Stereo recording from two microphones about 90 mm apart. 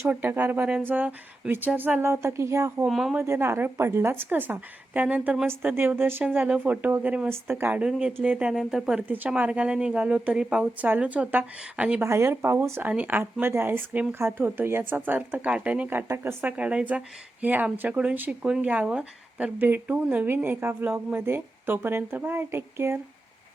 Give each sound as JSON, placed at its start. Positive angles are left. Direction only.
{"t": 0.0, "sound": "speech", "side_deg": -25}
{"t": 2.8, "sound": "speech", "side_deg": -5}
{"t": 3.2, "sound": "speech", "side_deg": -30}
{"t": 7.8, "sound": "speech", "side_deg": -10}
{"t": 9.0, "sound": "speech", "side_deg": -20}
{"t": 10.8, "sound": "speech", "side_deg": -20}
{"t": 12.0, "sound": "speech", "side_deg": -30}